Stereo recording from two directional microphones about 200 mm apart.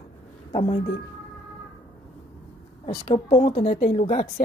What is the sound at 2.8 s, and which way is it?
A woman's voice, 25° left (ahead or behind).